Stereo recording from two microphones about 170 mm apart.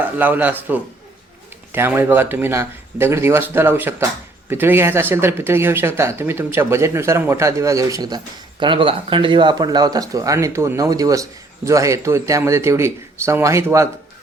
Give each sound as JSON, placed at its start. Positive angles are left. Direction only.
{"t": 0.0, "sound": "speech", "side_deg": -10}